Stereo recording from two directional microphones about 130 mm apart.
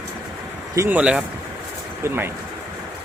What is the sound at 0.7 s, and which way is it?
Speech, 20° right (ahead or behind).